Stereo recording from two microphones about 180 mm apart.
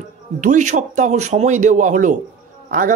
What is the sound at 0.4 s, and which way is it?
Speech, 45° right (ahead or behind).